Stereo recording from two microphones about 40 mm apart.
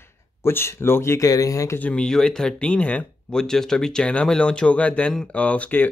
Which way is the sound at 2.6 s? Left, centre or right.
Left.